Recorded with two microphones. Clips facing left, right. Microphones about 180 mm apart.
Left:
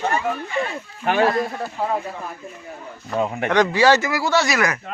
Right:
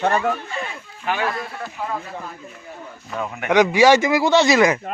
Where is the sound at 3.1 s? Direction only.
30° left (ahead or behind).